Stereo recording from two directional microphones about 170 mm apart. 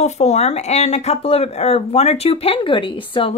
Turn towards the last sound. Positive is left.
turn(degrees=30)  # may be behind; listen again after turning